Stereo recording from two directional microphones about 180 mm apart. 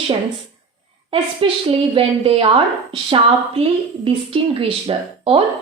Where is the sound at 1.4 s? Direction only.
30° right (ahead or behind).